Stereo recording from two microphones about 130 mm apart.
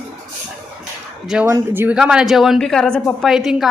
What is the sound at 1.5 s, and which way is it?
Speech, 15° right (ahead or behind).